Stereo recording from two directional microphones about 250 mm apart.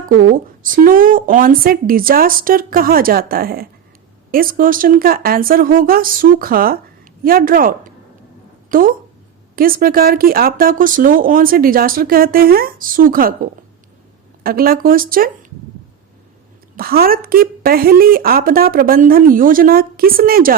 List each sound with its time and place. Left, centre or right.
0.1 s speech: right
16.7 s speech: right